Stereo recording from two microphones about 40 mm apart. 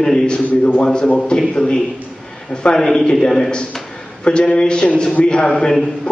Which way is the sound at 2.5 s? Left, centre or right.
Left.